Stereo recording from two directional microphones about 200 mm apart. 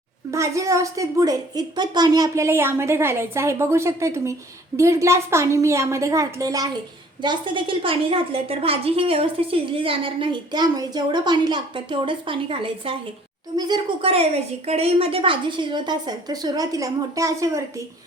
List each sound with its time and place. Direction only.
0.3 s a woman's voice: 15° right (ahead or behind)